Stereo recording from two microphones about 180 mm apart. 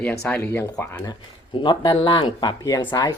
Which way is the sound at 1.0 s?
25° left (ahead or behind).